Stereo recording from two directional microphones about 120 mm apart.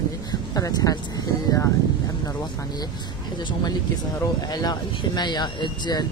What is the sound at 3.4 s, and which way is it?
Speech, 40° left (ahead or behind).